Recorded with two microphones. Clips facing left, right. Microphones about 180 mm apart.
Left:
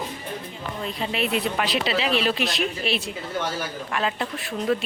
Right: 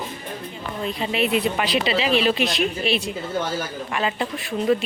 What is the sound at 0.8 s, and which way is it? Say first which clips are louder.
Speech: right 4 dB; centre (ahead or behind).